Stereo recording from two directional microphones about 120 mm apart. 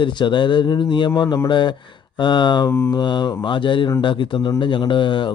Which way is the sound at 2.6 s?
20° left (ahead or behind).